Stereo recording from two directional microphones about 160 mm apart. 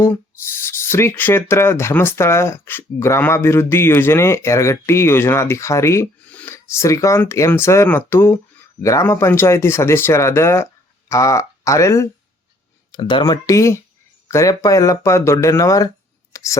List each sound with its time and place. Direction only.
0.6 s speech: 15° left (ahead or behind)
16.3 s chopping: 20° left (ahead or behind)